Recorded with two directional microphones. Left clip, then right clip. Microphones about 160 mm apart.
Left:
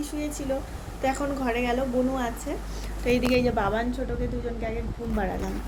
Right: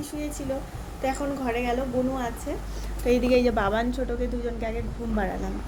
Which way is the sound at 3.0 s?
60° right (ahead or behind).